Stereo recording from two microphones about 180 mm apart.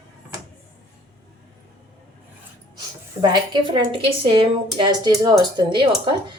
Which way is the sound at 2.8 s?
25° right (ahead or behind).